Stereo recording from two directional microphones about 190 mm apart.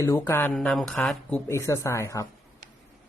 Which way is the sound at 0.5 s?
Centre (ahead or behind).